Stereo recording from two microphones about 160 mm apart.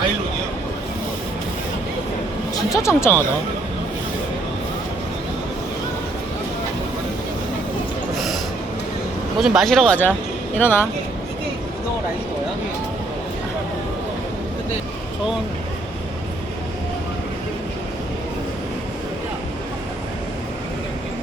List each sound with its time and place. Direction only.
2.7 s speech: 15° left (ahead or behind)
9.4 s speech: centre (ahead or behind)